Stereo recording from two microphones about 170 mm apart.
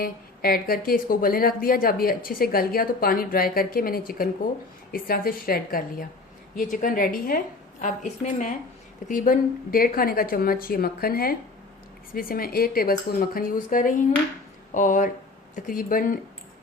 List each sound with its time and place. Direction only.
0.0 s a woman's voice: 60° left (ahead or behind); by 8.5 s 45° left (ahead or behind)
9.0 s a woman's voice: 55° left (ahead or behind)